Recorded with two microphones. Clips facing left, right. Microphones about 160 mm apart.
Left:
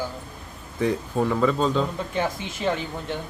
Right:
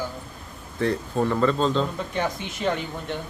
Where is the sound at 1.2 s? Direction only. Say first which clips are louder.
Even; 5° left (ahead or behind).